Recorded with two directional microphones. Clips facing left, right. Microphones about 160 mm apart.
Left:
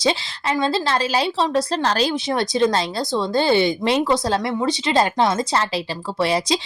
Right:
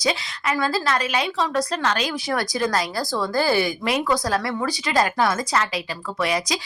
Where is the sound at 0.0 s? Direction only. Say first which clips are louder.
Left 3 dB; 25° left (ahead or behind).